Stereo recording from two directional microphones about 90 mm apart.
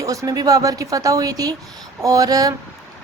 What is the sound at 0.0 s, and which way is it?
A woman's voice, 40° right (ahead or behind).